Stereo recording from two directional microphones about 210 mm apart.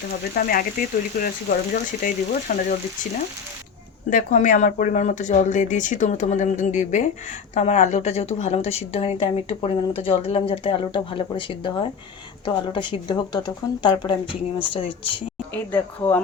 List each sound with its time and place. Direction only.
0.3 s speech: 45° left (ahead or behind)
4.1 s a woman's voice: 40° left (ahead or behind)
15.7 s speech: 10° left (ahead or behind)